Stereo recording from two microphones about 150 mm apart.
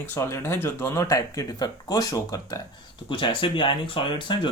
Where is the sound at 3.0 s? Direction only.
35° left (ahead or behind).